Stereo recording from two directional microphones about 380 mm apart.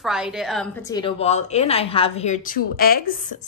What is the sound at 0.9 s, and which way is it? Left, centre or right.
A woman's voice, centre.